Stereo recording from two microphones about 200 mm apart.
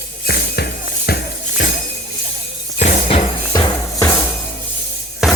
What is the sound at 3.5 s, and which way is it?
Music, 20° left (ahead or behind).